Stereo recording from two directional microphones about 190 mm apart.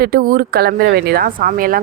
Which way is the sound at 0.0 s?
50° right (ahead or behind).